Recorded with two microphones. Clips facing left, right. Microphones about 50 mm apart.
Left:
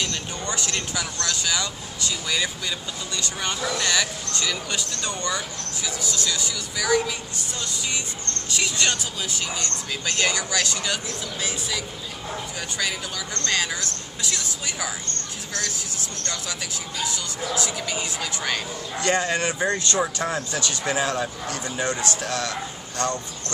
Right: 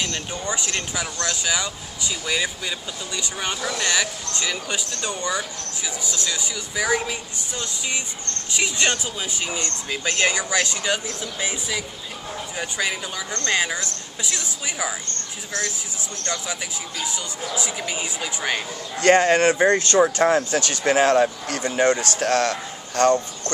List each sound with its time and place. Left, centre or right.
0.0 s speech: centre
17.0 s speech: centre
18.9 s speech: right